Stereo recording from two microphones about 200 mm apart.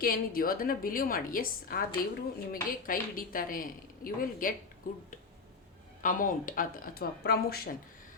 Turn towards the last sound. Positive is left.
turn(degrees=50)  # may be behind; listen again after turning